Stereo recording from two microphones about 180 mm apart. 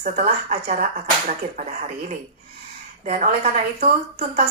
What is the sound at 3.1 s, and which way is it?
Speech, 40° right (ahead or behind).